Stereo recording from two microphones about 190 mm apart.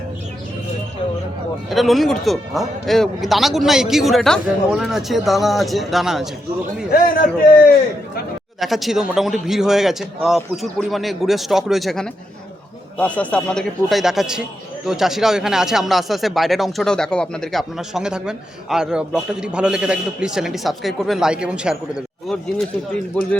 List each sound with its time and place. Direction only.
1.7 s speech: centre (ahead or behind)
6.9 s a man's voice: 50° left (ahead or behind)
8.5 s speech: centre (ahead or behind)